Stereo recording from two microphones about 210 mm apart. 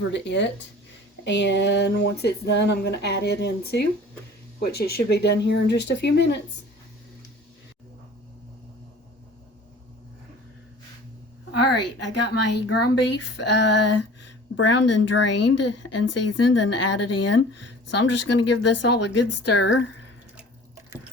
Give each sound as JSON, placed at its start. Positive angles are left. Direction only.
{"t": 0.1, "sound": "a woman's voice", "side_deg": 55}
{"t": 12.3, "sound": "speech", "side_deg": 55}